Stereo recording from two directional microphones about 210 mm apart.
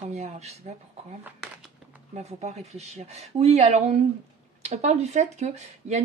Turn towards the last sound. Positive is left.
turn(degrees=-35)  # may be behind; listen again after turning